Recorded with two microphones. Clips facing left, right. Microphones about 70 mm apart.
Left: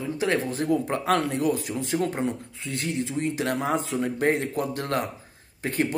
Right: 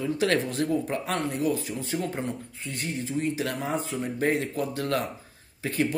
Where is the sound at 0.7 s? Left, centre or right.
Left.